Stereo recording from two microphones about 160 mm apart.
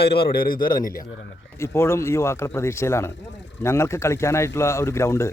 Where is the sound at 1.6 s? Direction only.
15° left (ahead or behind).